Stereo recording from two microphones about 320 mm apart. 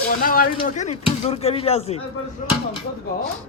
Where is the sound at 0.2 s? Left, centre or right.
Left.